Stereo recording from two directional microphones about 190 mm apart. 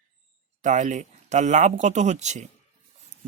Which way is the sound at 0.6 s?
40° right (ahead or behind).